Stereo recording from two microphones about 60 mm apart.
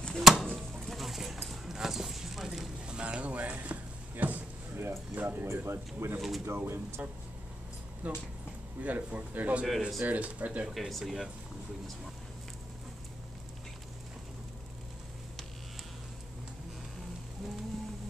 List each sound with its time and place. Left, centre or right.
0.2 s a sound: centre
2.9 s a sound: centre
4.7 s speech: right
8.0 s a man's voice: right
9.7 s speech: centre
10.0 s a man's voice: right
10.7 s speech: centre